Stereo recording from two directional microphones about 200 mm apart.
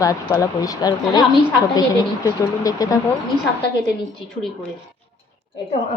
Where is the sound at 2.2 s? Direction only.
15° left (ahead or behind).